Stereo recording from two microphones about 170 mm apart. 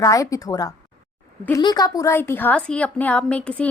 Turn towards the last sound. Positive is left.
turn(degrees=10)  # may be behind; listen again after turning